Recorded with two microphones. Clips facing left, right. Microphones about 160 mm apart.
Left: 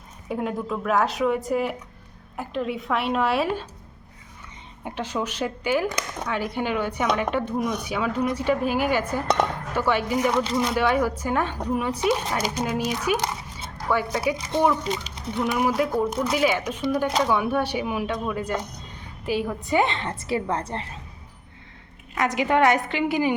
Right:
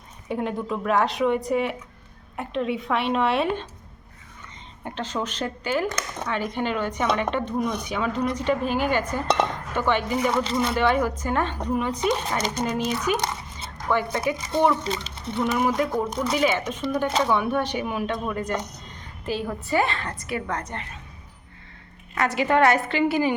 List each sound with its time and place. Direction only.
0.3 s a woman's voice: centre (ahead or behind)
4.8 s speech: 10° left (ahead or behind)
9.4 s dishes: 10° left (ahead or behind)
10.2 s a woman's voice: 5° left (ahead or behind); by 21.0 s 30° left (ahead or behind)
22.1 s speech: 15° left (ahead or behind)